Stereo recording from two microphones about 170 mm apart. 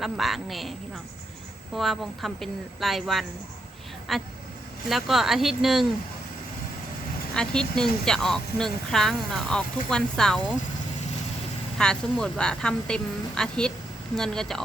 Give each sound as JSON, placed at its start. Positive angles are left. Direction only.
{"t": 0.0, "sound": "speech", "side_deg": 0}
{"t": 1.7, "sound": "speech", "side_deg": 0}
{"t": 7.3, "sound": "speech", "side_deg": 5}
{"t": 11.8, "sound": "speech", "side_deg": 5}